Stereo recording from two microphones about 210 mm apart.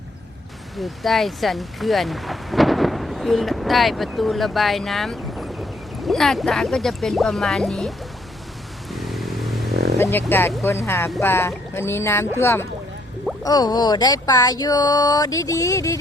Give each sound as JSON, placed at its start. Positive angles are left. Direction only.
{"t": 0.8, "sound": "speech", "side_deg": 0}
{"t": 8.9, "sound": "a sound", "side_deg": 0}
{"t": 10.0, "sound": "speech", "side_deg": 10}